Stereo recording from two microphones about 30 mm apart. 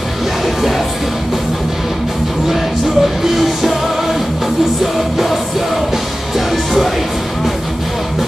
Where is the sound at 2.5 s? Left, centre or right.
Centre.